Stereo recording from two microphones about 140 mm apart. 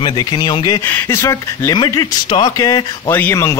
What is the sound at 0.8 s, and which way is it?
Speech, 15° left (ahead or behind).